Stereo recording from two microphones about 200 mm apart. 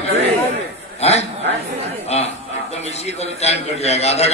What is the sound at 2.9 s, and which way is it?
A man's voice, 30° left (ahead or behind).